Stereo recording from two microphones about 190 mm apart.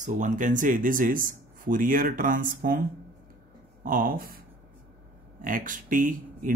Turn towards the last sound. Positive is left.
turn(degrees=-45)  # may be behind; listen again after turning